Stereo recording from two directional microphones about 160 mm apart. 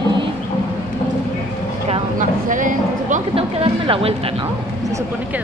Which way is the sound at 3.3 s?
35° right (ahead or behind).